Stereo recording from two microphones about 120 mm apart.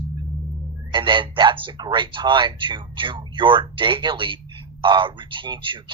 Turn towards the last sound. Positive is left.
turn(degrees=-45)  # may be behind; listen again after turning